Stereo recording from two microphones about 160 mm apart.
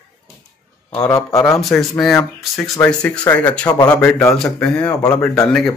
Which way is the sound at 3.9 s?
10° left (ahead or behind).